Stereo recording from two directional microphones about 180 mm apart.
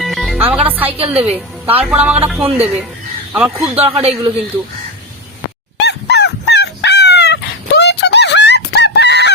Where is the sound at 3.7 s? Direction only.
30° right (ahead or behind).